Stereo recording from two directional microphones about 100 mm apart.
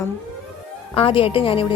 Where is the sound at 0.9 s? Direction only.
65° left (ahead or behind).